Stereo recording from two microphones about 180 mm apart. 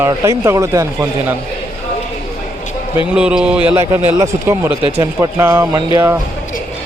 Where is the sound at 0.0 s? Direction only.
15° right (ahead or behind).